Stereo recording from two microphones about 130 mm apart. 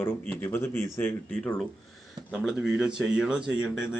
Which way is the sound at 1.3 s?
5° left (ahead or behind).